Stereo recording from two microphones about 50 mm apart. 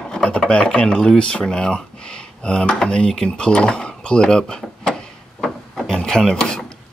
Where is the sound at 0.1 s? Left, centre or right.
Centre.